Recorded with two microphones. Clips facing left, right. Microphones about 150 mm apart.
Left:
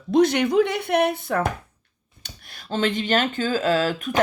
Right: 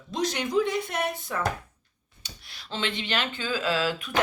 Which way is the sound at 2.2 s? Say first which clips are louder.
Left 3 dB; 50° left (ahead or behind).